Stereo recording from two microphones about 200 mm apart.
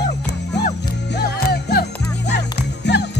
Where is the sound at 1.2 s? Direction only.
50° left (ahead or behind).